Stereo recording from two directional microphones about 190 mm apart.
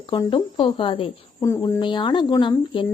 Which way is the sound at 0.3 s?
25° left (ahead or behind).